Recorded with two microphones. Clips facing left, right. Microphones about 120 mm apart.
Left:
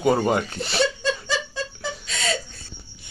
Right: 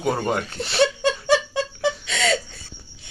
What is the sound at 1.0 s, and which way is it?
Laughter, 65° right (ahead or behind).